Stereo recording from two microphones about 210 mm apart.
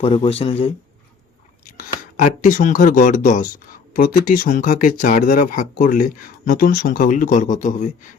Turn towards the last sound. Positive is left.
turn(degrees=35)  # may be behind; listen again after turning